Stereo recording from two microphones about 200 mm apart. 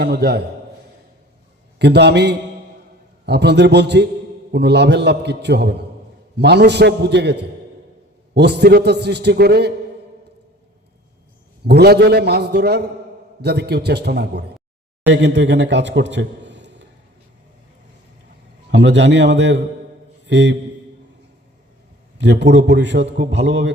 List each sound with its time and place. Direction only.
0.0 s a man's voice: 55° right (ahead or behind)
1.8 s a man's voice: 55° right (ahead or behind)
11.6 s a man's voice: 55° right (ahead or behind)
18.7 s a man's voice: 60° right (ahead or behind)
22.2 s a man's voice: 60° right (ahead or behind)